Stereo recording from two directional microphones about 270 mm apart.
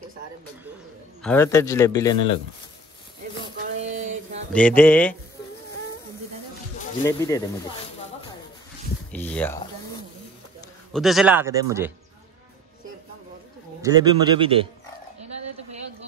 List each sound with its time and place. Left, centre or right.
1.2 s a man's voice: centre
3.6 s a sound: right
4.5 s a man's voice: centre
7.1 s a man's voice: centre
9.1 s a sound: centre
10.9 s speech: centre
13.8 s speech: centre